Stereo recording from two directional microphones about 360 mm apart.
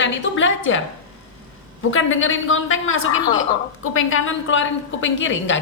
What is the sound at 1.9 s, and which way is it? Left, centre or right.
A woman's voice, left.